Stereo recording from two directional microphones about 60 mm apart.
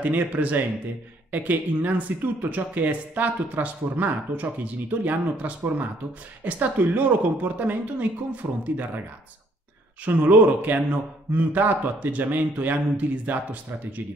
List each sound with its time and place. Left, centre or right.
0.0 s a man's voice: right
10.0 s a man's voice: right